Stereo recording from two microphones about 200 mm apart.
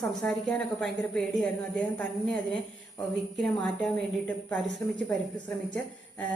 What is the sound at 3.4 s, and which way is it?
Speech, 5° left (ahead or behind).